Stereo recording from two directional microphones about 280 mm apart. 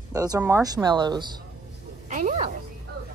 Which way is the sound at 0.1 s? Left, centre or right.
Centre.